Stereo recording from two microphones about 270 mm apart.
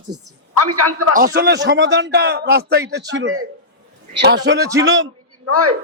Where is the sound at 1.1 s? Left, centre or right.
Right.